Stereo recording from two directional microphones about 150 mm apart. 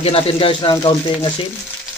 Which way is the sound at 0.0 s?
40° left (ahead or behind).